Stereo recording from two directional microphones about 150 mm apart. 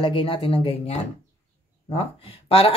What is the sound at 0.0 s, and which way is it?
Speech, 35° left (ahead or behind).